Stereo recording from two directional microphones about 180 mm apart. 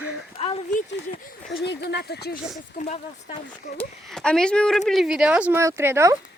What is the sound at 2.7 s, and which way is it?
Speech, 40° left (ahead or behind).